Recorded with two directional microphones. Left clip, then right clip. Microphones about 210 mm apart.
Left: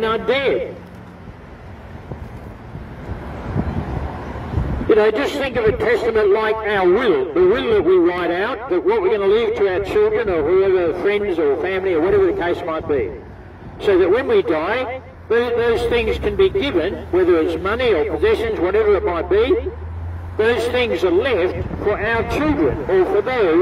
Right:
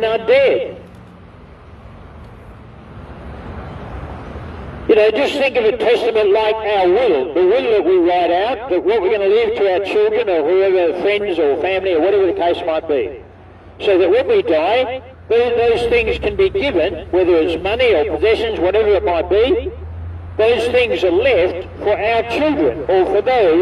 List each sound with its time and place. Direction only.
0.0 s a man's voice: 35° right (ahead or behind)
4.8 s a man's voice: 30° right (ahead or behind)